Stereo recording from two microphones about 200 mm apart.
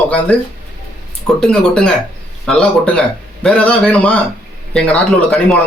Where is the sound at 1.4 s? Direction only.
5° left (ahead or behind).